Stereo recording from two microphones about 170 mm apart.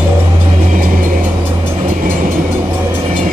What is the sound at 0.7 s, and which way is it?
Vehicle, 55° right (ahead or behind).